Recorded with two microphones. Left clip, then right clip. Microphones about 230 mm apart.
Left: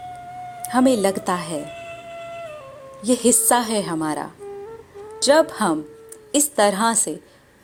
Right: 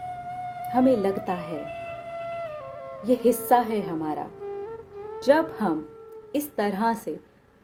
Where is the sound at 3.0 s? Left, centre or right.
Left.